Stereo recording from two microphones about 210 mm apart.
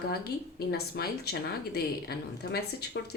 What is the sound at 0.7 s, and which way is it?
A woman's voice, 50° left (ahead or behind).